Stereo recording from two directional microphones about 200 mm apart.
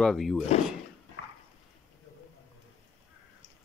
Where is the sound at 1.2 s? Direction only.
65° left (ahead or behind).